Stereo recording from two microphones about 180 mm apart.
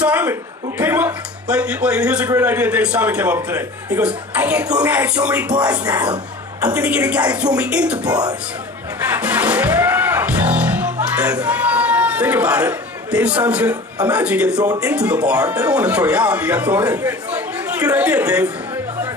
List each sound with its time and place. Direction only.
0.0 s a man's voice: 10° right (ahead or behind)
6.7 s a man's voice: 5° right (ahead or behind)
8.1 s speech: 20° right (ahead or behind)
9.0 s music: 10° right (ahead or behind)
11.2 s a man's voice: 5° right (ahead or behind)